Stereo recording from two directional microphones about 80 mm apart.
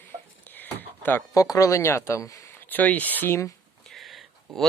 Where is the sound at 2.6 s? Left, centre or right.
Left.